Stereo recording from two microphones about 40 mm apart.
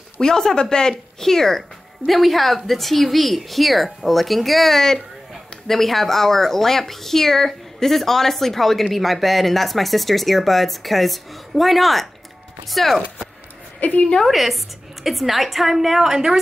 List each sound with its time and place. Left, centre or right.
0.2 s speech: centre
13.7 s a woman's voice: left
14.2 s speech: centre